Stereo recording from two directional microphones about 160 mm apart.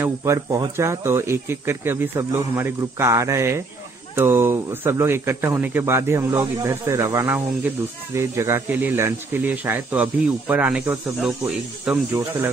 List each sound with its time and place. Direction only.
0.0 s speech: 20° right (ahead or behind)